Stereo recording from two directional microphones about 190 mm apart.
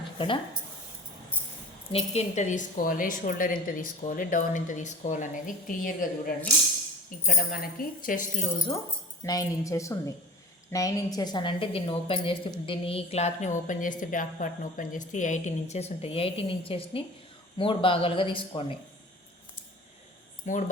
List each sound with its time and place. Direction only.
1.9 s a woman's voice: 35° left (ahead or behind)
9.2 s a woman's voice: 15° left (ahead or behind)
20.4 s speech: 40° left (ahead or behind)